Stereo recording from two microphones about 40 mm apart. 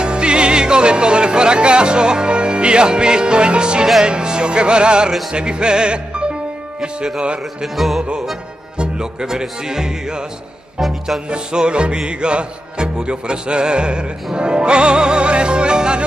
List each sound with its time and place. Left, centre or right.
0.0 s music: right
7.6 s music: centre
8.7 s speech: centre
10.8 s music: centre
11.2 s music: right